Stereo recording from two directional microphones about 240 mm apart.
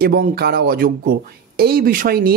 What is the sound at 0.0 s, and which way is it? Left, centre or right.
Speech, right.